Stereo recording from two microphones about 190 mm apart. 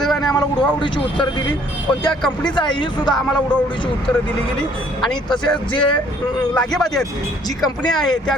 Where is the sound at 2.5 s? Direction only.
25° left (ahead or behind).